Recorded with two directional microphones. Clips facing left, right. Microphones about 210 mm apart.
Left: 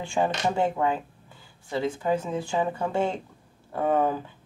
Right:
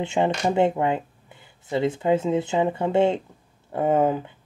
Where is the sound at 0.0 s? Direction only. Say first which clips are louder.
Right 3 dB; 20° right (ahead or behind).